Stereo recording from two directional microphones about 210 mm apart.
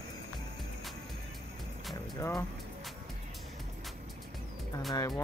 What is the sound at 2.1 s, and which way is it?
Speech, 15° left (ahead or behind).